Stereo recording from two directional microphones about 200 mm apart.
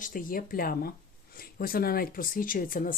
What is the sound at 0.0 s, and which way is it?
Speech, 45° left (ahead or behind).